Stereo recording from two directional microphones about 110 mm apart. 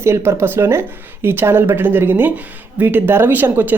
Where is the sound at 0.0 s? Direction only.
25° right (ahead or behind).